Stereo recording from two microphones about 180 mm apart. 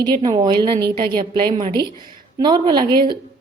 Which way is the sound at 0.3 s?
25° right (ahead or behind).